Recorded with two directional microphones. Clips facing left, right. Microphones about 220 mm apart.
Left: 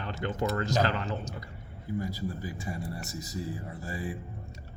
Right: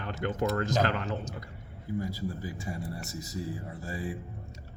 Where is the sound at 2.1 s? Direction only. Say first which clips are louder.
Even; 25° right (ahead or behind).